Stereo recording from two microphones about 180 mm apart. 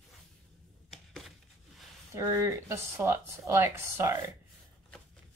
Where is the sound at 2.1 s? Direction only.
15° right (ahead or behind).